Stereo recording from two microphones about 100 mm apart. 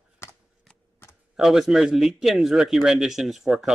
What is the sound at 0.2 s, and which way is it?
Shuffling cards, 25° left (ahead or behind).